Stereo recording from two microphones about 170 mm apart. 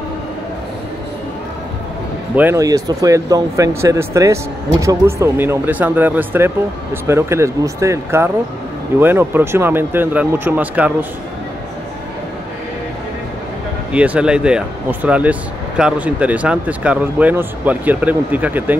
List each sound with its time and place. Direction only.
2.3 s speech: 15° right (ahead or behind)
13.9 s speech: 5° right (ahead or behind)